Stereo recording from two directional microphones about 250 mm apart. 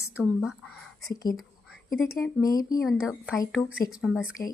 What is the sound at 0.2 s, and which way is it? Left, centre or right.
Speech, centre.